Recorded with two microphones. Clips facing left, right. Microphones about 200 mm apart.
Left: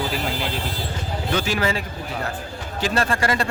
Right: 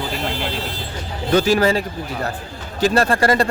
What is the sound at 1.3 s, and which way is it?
A man's voice, 40° right (ahead or behind).